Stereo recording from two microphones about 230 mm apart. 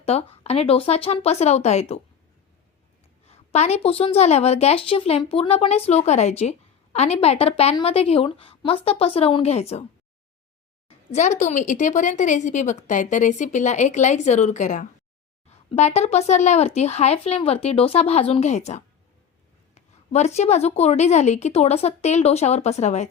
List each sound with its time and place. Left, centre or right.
0.0 s a woman's voice: left
3.2 s a woman's voice: left
10.8 s a woman's voice: left